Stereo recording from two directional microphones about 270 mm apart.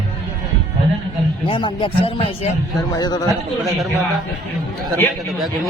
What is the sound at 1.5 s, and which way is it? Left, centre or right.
A man's voice, centre.